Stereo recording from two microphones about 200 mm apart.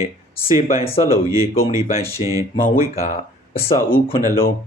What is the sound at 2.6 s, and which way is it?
Speech, 45° left (ahead or behind).